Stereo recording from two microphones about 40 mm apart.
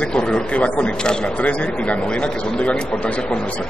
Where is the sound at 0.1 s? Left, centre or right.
Left.